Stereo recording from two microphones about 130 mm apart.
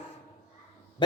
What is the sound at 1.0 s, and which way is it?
Dog, 35° left (ahead or behind).